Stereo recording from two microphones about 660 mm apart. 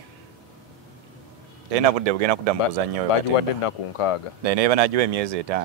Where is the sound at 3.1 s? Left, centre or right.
Left.